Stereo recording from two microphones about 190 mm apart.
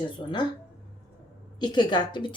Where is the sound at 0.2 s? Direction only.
25° left (ahead or behind).